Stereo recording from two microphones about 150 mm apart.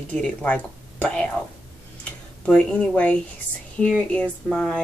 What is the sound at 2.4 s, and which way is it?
Speech, 10° left (ahead or behind).